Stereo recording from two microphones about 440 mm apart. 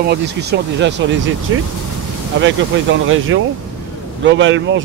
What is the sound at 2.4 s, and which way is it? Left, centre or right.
Speech, right.